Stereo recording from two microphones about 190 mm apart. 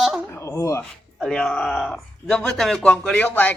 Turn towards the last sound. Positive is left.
turn(degrees=10)  # may be behind; listen again after turning